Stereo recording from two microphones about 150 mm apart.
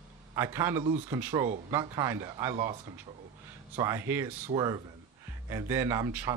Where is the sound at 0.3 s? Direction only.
20° right (ahead or behind).